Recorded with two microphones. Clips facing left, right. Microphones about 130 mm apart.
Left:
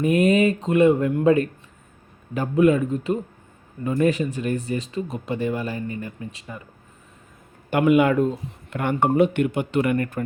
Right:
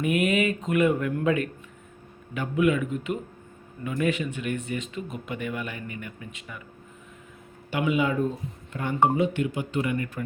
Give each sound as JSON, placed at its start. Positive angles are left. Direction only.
{"t": 0.0, "sound": "speech", "side_deg": 35}
{"t": 7.7, "sound": "speech", "side_deg": 55}